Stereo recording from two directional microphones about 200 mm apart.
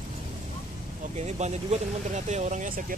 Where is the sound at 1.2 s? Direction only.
35° right (ahead or behind).